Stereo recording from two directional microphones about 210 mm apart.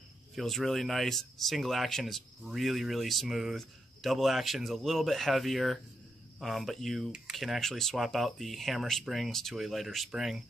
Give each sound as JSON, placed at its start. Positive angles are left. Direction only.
{"t": 0.4, "sound": "speech", "side_deg": 0}